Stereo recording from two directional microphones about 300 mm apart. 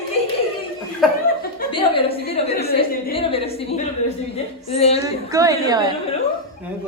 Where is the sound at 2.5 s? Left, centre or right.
Left.